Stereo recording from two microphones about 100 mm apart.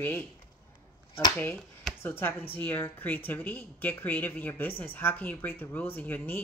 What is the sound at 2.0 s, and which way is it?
Speech, 20° left (ahead or behind).